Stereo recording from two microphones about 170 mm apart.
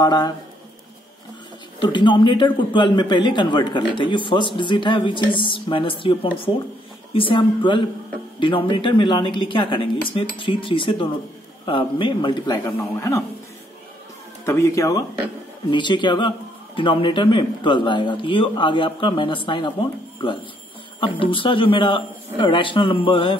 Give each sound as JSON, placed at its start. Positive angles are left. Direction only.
{"t": 0.0, "sound": "a man's voice", "side_deg": 25}
{"t": 1.8, "sound": "a man's voice", "side_deg": 25}
{"t": 14.4, "sound": "a man's voice", "side_deg": 15}
{"t": 21.0, "sound": "a man's voice", "side_deg": 30}